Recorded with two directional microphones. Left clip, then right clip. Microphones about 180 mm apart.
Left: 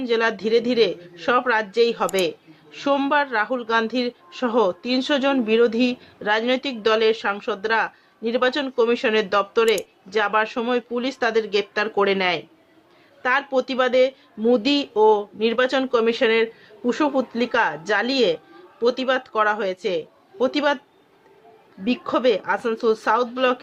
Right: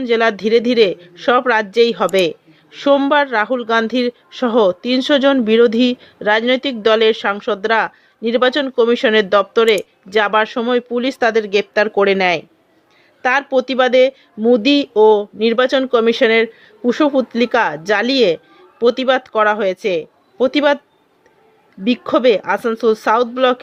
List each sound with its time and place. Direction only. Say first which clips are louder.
0.0 s a woman's voice: right 6 dB; 30° right (ahead or behind)
21.8 s speech: right 7 dB; 30° right (ahead or behind)